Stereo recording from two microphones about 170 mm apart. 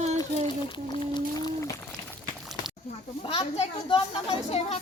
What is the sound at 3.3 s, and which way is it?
A child's voice, 30° left (ahead or behind).